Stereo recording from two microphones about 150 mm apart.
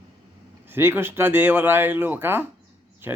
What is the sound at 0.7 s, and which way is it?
Speech, 15° right (ahead or behind).